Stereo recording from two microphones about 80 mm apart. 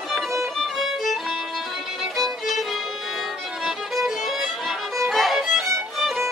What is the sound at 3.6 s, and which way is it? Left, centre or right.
Music, centre.